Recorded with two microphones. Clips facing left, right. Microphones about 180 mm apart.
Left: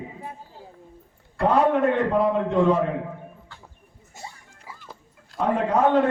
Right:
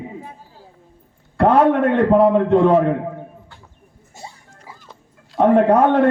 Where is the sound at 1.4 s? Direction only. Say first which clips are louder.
Right 5 dB; 60° right (ahead or behind).